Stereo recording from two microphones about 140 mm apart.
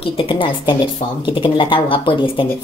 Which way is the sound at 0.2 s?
40° left (ahead or behind).